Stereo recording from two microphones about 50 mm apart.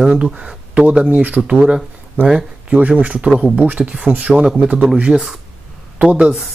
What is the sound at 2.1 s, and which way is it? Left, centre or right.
Speech, centre.